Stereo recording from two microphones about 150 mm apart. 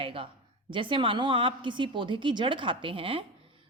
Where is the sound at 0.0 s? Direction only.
35° right (ahead or behind).